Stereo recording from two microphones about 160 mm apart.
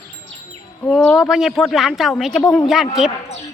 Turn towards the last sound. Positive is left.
turn(degrees=-5)  # may be behind; listen again after turning